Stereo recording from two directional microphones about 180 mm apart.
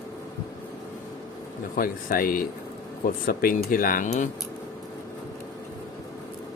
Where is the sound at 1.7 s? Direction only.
50° left (ahead or behind).